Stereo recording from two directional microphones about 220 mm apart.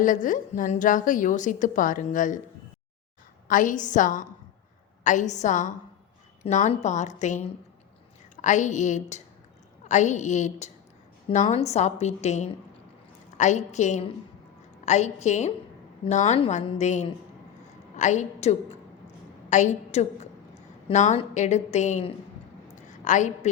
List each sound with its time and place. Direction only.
0.0 s a woman's voice: 35° left (ahead or behind)
3.5 s a woman's voice: 35° left (ahead or behind)
22.7 s a sound: 35° left (ahead or behind)